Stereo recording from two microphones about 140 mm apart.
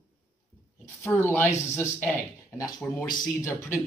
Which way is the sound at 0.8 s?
15° left (ahead or behind).